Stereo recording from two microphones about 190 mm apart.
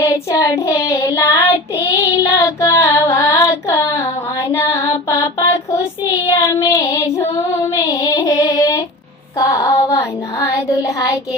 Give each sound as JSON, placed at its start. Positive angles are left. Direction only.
{"t": 0.0, "sound": "child singing", "side_deg": 15}
{"t": 4.5, "sound": "female singing", "side_deg": 15}
{"t": 6.3, "sound": "child singing", "side_deg": 15}